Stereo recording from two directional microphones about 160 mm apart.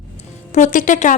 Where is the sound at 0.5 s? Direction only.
50° left (ahead or behind).